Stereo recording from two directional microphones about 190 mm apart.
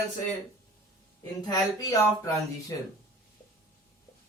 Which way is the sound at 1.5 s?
20° left (ahead or behind).